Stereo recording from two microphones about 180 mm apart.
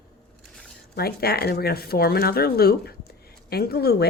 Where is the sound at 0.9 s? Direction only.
60° left (ahead or behind).